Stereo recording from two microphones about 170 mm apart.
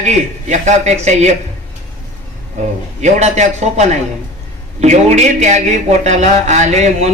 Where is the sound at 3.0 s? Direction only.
40° right (ahead or behind).